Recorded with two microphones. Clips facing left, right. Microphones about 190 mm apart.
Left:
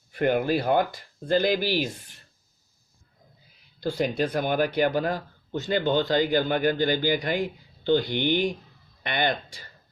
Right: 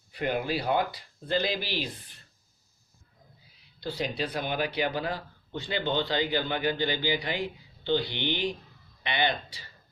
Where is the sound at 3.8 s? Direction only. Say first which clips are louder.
Left 6 dB; 45° left (ahead or behind).